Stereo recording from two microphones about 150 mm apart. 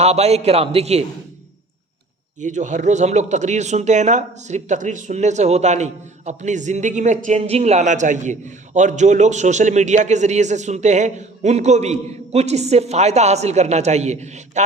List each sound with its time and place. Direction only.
0.0 s speech: 45° right (ahead or behind)
2.4 s speech: 55° right (ahead or behind)